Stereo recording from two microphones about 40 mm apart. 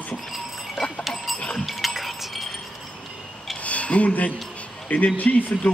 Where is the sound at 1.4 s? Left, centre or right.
Left.